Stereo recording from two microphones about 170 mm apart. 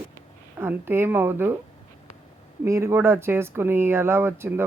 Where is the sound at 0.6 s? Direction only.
15° right (ahead or behind).